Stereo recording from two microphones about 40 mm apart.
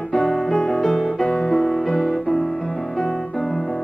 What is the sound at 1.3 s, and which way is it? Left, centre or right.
Music, centre.